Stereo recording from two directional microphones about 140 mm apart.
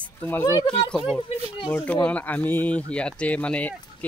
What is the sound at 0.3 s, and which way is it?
Speech, 20° left (ahead or behind).